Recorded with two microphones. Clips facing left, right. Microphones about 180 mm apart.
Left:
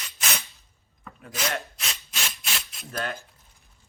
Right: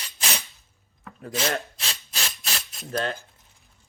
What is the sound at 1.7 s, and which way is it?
Rub, 35° right (ahead or behind).